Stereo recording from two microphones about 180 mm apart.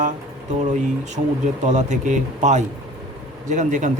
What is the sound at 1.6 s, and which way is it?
Speech, 40° right (ahead or behind).